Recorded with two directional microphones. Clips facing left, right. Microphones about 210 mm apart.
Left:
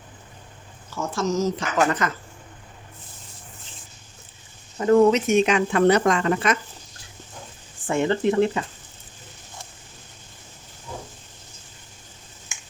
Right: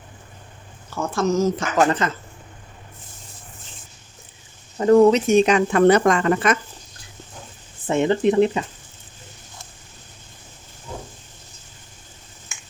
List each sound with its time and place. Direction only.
0.9 s speech: 55° right (ahead or behind)
1.8 s speech: 30° right (ahead or behind)
4.8 s speech: 35° right (ahead or behind); by 6.6 s 50° right (ahead or behind)
7.9 s speech: 20° right (ahead or behind)